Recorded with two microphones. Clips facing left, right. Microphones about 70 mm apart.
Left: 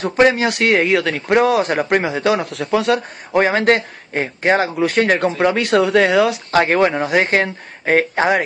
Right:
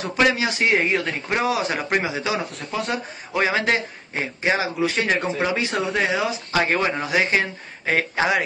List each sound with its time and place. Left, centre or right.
0.2 s a man's voice: left
0.5 s speech: left
1.3 s a man's voice: left
2.5 s speech: left
3.3 s a man's voice: left
6.5 s a man's voice: left